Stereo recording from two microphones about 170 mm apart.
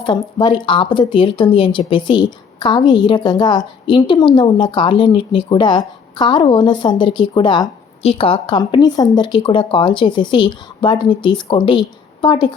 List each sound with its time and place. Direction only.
0.0 s speech: 30° left (ahead or behind)